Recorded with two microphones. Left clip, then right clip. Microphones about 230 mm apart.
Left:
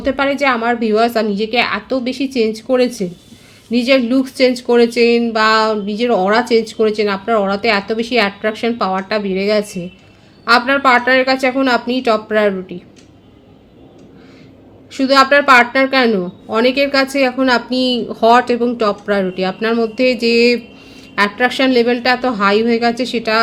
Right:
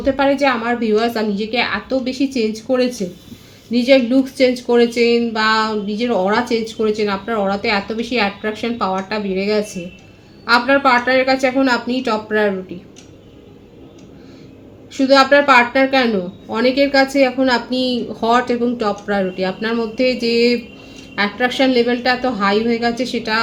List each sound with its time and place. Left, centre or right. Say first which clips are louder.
0.0 s speech: even; left
14.9 s speech: left 1 dB; left